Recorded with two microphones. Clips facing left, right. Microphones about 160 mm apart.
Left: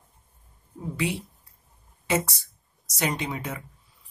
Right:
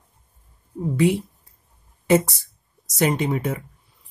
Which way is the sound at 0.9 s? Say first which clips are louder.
Right 10 dB; 50° right (ahead or behind).